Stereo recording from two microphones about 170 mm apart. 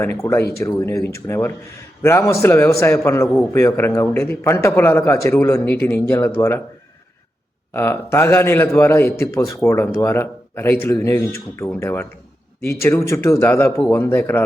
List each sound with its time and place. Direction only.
0.0 s a man's voice: 15° left (ahead or behind)
7.7 s a man's voice: 15° left (ahead or behind)